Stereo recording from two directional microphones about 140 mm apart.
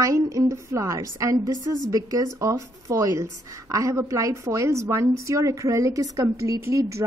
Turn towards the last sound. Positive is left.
turn(degrees=-20)  # may be behind; listen again after turning